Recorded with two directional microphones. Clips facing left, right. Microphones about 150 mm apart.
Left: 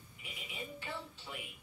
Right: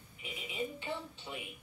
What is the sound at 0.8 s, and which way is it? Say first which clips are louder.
Music: right 4 dB; 20° right (ahead or behind).